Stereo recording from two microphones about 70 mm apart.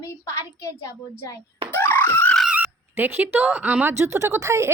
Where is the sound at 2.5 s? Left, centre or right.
Right.